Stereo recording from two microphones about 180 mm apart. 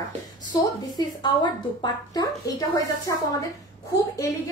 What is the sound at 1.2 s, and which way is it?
A woman's voice, 25° left (ahead or behind).